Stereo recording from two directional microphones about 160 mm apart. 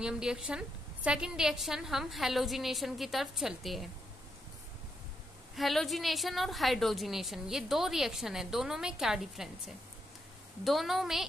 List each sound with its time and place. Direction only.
0.0 s a woman's voice: 5° right (ahead or behind)
5.6 s a woman's voice: centre (ahead or behind)
10.6 s a woman's voice: centre (ahead or behind)